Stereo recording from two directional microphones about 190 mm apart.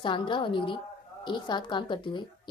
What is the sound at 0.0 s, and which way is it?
A woman's voice, 25° left (ahead or behind).